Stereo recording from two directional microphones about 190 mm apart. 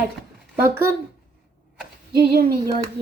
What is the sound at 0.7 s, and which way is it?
Speech, 10° right (ahead or behind).